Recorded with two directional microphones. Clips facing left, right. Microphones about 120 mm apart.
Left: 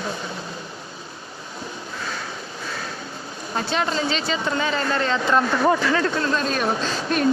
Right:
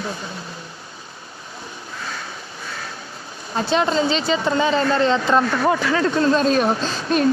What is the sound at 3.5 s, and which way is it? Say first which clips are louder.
A woman's voice: right 5 dB; 25° right (ahead or behind).